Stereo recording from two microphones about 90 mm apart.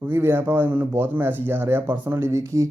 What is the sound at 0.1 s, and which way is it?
Speech, 25° right (ahead or behind).